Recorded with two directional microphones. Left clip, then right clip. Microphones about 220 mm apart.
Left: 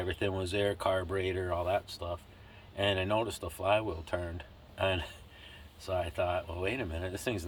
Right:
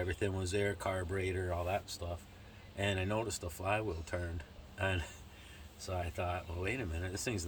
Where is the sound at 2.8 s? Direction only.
10° left (ahead or behind).